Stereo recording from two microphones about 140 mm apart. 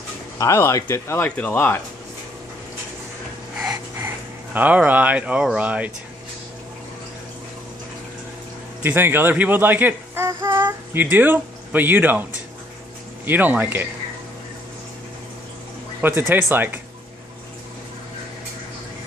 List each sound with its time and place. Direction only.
0.4 s speech: 20° left (ahead or behind)
3.5 s a sound: 10° right (ahead or behind)
4.6 s speech: 10° right (ahead or behind)
8.8 s speech: 15° right (ahead or behind)
10.4 s child singing: 30° right (ahead or behind)
10.9 s speech: 15° right (ahead or behind)
16.0 s speech: 15° right (ahead or behind)